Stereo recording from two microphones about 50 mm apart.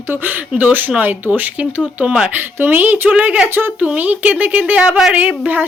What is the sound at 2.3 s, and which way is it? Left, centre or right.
A woman's voice, right.